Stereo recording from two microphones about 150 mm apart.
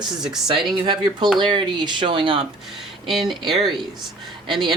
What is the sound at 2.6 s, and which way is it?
Speech, centre (ahead or behind).